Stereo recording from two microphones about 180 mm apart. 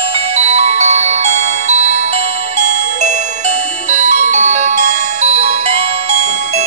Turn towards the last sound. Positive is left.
turn(degrees=-40)  # may be behind; listen again after turning